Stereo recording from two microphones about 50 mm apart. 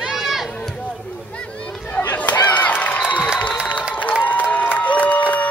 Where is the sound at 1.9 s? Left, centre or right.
Left.